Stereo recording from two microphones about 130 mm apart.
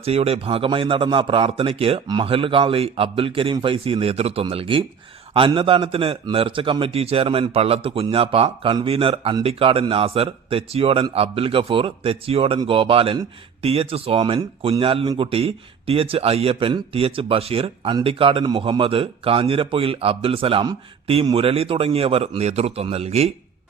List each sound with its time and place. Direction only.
0.0 s a man's voice: 50° right (ahead or behind)